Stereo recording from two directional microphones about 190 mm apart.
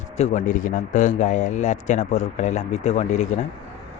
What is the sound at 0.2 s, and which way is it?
A man's voice, 40° left (ahead or behind).